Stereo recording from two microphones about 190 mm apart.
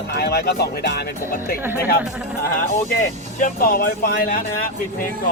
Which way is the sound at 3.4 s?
45° left (ahead or behind).